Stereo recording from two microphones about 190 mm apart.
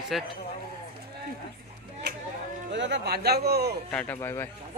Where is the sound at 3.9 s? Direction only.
5° left (ahead or behind).